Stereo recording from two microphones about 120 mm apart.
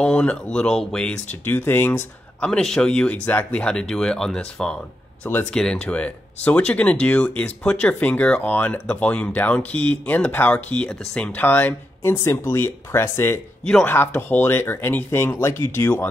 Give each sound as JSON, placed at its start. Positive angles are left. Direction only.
{"t": 0.0, "sound": "speech", "side_deg": 5}
{"t": 1.4, "sound": "speech", "side_deg": 20}